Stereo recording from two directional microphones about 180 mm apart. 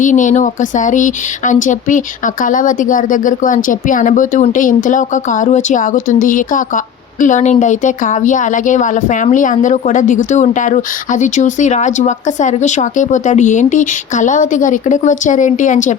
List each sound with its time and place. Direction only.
0.0 s speech: 45° left (ahead or behind)